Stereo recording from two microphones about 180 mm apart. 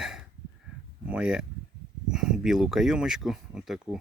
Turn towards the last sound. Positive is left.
turn(degrees=0)  # may be behind; listen again after turning